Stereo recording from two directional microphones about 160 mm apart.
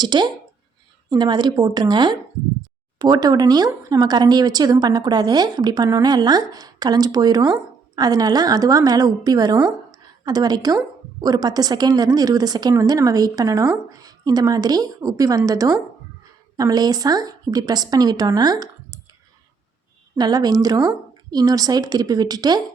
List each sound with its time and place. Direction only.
0.0 s a woman's voice: 25° right (ahead or behind)
20.1 s a woman's voice: 25° right (ahead or behind)